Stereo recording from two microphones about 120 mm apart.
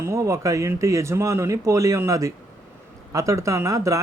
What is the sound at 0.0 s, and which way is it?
Speech, 25° right (ahead or behind).